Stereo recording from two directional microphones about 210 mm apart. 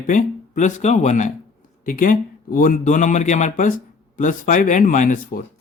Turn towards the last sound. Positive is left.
turn(degrees=40)  # may be behind; listen again after turning